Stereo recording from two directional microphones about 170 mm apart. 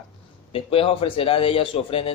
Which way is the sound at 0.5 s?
35° left (ahead or behind).